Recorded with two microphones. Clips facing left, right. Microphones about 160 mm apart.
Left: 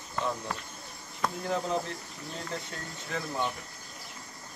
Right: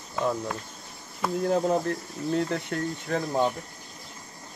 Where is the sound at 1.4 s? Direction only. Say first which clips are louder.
Right 8 dB; 45° right (ahead or behind).